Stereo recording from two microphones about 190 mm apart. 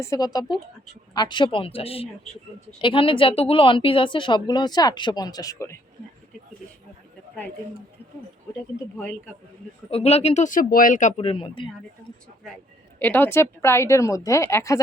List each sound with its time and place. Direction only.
0.0 s a woman's voice: 15° left (ahead or behind)
9.9 s speech: 35° left (ahead or behind)
13.0 s a woman's voice: 10° left (ahead or behind)